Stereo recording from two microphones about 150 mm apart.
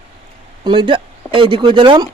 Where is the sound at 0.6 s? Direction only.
30° right (ahead or behind).